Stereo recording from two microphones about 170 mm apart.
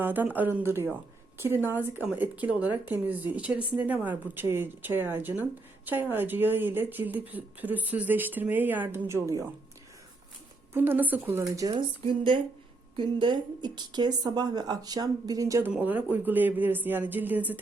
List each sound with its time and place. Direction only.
0.0 s speech: 10° right (ahead or behind)
10.8 s speech: 10° right (ahead or behind)